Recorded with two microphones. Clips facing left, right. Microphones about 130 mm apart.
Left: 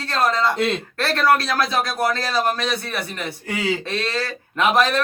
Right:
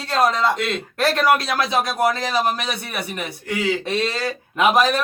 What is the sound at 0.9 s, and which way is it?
A man's voice, 15° right (ahead or behind).